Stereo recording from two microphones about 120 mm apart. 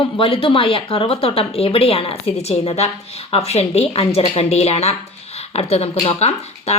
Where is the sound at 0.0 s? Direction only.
50° left (ahead or behind).